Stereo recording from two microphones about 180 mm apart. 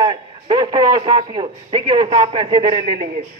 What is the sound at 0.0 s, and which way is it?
A man's voice, 25° right (ahead or behind).